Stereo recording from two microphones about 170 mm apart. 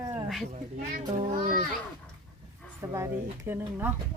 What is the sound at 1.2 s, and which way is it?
Speech, 35° right (ahead or behind).